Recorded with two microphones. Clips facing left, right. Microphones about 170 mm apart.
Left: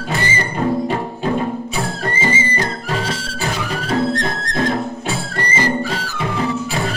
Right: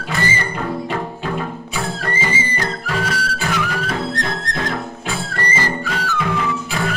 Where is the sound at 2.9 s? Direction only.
25° left (ahead or behind).